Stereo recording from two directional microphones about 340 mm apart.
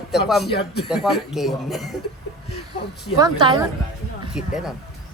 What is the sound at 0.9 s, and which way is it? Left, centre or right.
Speech, centre.